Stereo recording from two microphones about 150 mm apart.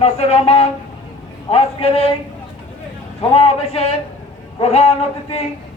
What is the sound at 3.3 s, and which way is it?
A man's voice, 40° left (ahead or behind).